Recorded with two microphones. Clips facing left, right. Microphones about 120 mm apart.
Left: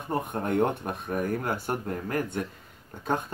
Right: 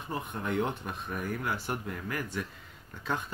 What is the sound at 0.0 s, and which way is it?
Speech, 55° left (ahead or behind).